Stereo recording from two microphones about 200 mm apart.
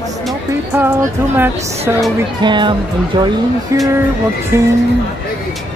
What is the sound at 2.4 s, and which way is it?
Speech, 25° right (ahead or behind).